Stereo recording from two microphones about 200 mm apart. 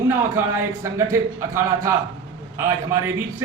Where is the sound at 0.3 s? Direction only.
15° right (ahead or behind).